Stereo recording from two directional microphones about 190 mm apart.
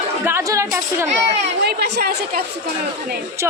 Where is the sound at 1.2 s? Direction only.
55° right (ahead or behind).